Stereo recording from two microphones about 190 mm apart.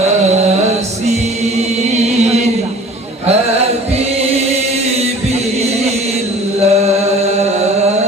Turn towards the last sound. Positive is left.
turn(degrees=-35)  # may be behind; listen again after turning